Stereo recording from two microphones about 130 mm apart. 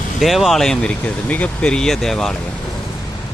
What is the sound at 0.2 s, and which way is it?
Speech, centre (ahead or behind).